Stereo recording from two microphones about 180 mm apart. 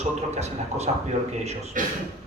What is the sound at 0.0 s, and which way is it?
Speech, 35° right (ahead or behind).